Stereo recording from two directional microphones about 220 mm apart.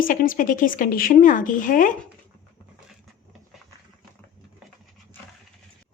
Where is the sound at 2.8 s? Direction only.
Centre (ahead or behind).